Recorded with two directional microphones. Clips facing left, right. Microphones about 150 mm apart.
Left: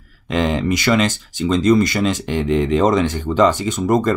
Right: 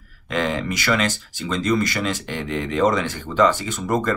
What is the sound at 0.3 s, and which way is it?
Speech, 25° left (ahead or behind).